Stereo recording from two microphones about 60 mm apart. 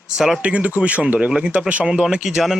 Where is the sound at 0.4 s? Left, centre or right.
Right.